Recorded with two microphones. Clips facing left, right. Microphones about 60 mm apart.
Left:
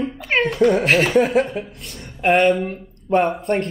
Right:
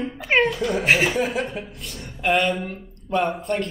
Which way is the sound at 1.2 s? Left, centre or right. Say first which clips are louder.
Left 7 dB; left.